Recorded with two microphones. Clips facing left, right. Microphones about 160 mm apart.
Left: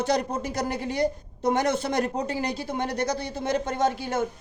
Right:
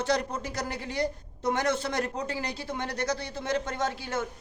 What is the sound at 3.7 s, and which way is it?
Speech, 45° left (ahead or behind).